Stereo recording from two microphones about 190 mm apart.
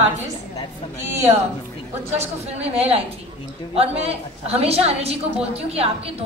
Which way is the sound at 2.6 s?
30° right (ahead or behind).